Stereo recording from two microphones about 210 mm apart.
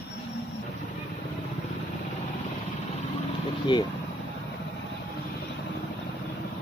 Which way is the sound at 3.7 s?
20° left (ahead or behind).